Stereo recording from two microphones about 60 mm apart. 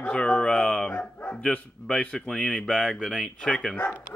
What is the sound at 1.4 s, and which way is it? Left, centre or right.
Speech, centre.